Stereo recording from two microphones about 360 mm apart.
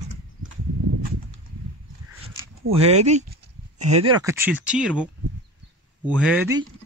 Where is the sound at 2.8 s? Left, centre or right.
Centre.